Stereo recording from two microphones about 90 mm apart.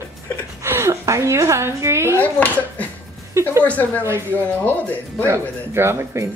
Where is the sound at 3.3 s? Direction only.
30° right (ahead or behind).